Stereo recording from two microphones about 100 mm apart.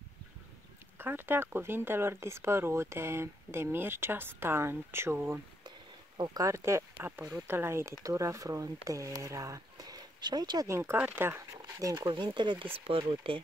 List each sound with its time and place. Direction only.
0.9 s speech: 20° right (ahead or behind)
6.1 s speech: 45° right (ahead or behind)
6.4 s speech: 30° right (ahead or behind)
10.7 s speech: 30° right (ahead or behind)
12.1 s speech: 55° right (ahead or behind)
12.7 s speech: 75° right (ahead or behind)